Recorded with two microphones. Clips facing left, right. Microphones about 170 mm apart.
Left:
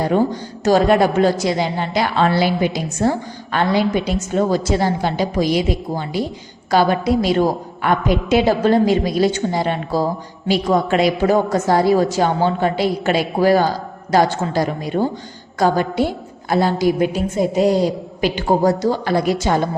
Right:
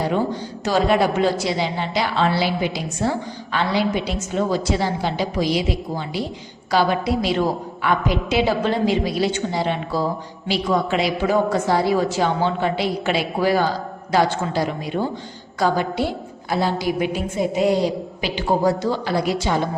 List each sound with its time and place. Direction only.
0.6 s a woman's voice: 45° left (ahead or behind)
6.7 s a woman's voice: 45° left (ahead or behind)